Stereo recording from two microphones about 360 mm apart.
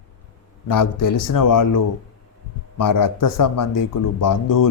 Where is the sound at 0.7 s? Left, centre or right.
Left.